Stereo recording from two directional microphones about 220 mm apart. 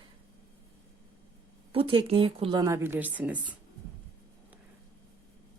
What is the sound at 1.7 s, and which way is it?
Speech, 25° right (ahead or behind).